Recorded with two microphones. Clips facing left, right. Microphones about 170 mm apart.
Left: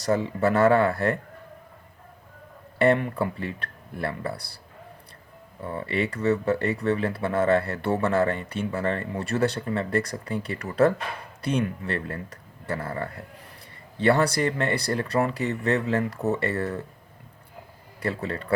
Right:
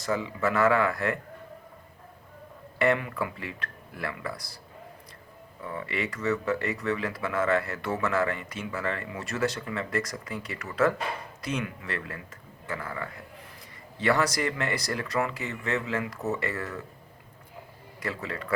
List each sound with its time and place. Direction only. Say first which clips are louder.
0.0 s speech: left 5 dB; 35° left (ahead or behind)
2.7 s speech: left 4 dB; 30° left (ahead or behind)
5.6 s speech: left 5 dB; 30° left (ahead or behind)
18.0 s speech: left 5 dB; 30° left (ahead or behind)